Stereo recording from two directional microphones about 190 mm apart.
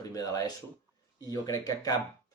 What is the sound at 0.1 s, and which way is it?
Speech, 20° left (ahead or behind).